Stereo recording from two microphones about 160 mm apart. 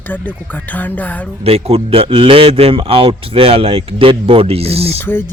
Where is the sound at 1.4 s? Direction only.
40° right (ahead or behind).